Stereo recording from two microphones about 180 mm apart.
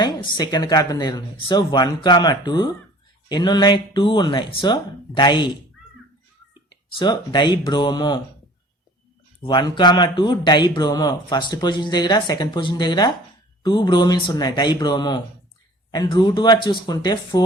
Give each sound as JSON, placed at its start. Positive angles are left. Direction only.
{"t": 0.0, "sound": "a man's voice", "side_deg": 25}
{"t": 7.0, "sound": "a man's voice", "side_deg": 25}
{"t": 9.4, "sound": "a man's voice", "side_deg": 25}